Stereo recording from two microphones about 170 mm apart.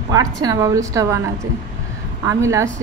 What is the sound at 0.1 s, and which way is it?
A woman's voice, 20° right (ahead or behind).